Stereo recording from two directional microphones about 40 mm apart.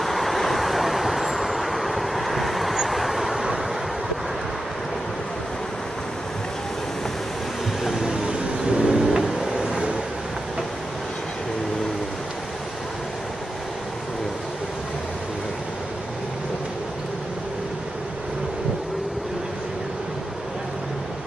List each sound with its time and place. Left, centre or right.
0.0 s vehicle: centre
8.0 s vehicle: centre
8.9 s a sound: centre